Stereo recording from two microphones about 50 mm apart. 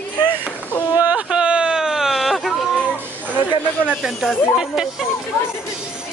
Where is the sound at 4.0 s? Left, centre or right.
Centre.